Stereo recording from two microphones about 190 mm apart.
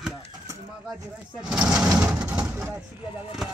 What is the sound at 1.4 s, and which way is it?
Speech, 5° right (ahead or behind).